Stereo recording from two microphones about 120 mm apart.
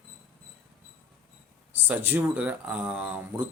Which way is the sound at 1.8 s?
15° right (ahead or behind).